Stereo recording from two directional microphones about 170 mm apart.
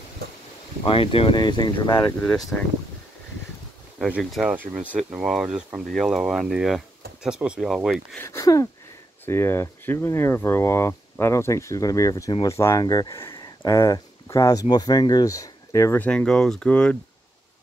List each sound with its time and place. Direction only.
0.8 s speech: 30° left (ahead or behind)
2.5 s speech: 5° left (ahead or behind)
4.0 s speech: 5° right (ahead or behind)
8.2 s speech: 15° left (ahead or behind)